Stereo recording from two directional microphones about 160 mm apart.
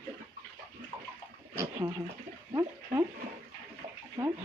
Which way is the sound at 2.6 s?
20° right (ahead or behind).